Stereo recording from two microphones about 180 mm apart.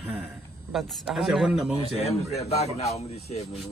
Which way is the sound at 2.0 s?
35° left (ahead or behind).